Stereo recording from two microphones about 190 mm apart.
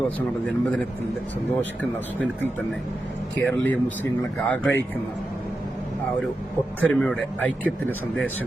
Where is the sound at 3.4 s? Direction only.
10° left (ahead or behind).